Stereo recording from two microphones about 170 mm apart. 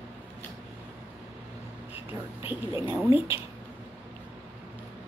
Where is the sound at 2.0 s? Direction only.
10° right (ahead or behind).